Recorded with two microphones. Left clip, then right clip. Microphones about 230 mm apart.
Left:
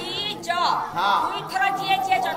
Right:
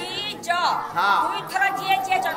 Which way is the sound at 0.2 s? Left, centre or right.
Centre.